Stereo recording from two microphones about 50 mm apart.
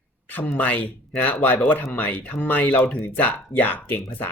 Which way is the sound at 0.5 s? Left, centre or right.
Left.